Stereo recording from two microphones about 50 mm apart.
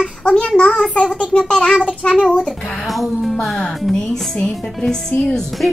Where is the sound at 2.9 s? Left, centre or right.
Centre.